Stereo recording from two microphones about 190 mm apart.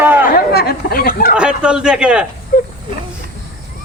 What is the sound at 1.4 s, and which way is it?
Speech, 5° right (ahead or behind).